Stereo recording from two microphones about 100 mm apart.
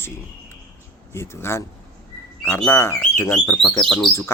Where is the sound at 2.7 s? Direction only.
25° left (ahead or behind).